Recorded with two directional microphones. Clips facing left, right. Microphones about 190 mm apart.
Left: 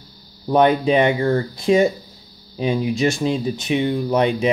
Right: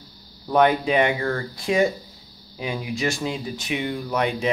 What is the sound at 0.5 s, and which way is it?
Speech, 25° left (ahead or behind).